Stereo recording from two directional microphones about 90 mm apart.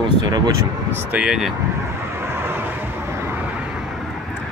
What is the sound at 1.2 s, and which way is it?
Speech, 5° right (ahead or behind).